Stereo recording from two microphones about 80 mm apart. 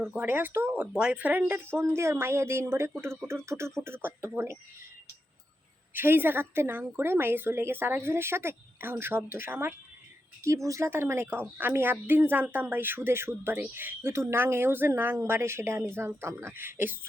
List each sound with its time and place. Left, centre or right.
0.1 s a woman's voice: right
0.7 s a woman's voice: centre
1.8 s speech: right
5.9 s a woman's voice: right
10.4 s a woman's voice: right